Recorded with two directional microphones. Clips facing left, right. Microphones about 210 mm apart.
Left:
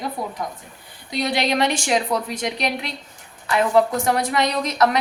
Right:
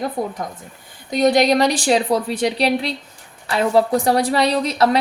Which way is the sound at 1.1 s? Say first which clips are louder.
Right 7 dB; 45° right (ahead or behind).